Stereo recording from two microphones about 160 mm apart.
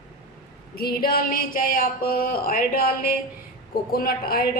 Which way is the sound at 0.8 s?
70° left (ahead or behind).